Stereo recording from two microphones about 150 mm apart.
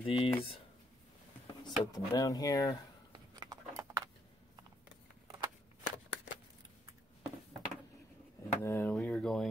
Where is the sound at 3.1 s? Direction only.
25° right (ahead or behind).